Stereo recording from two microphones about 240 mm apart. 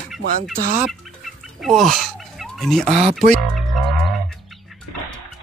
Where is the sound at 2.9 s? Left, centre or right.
Right.